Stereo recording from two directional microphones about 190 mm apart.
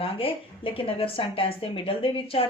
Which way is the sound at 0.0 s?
30° left (ahead or behind).